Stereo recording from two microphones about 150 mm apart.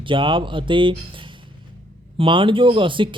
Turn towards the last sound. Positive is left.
turn(degrees=-35)  # may be behind; listen again after turning